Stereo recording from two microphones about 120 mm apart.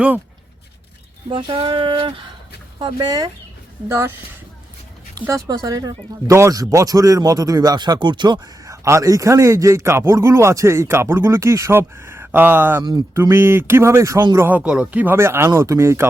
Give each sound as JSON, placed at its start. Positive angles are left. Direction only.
{"t": 1.3, "sound": "speech", "side_deg": -45}
{"t": 3.8, "sound": "speech", "side_deg": -20}
{"t": 5.3, "sound": "speech", "side_deg": -35}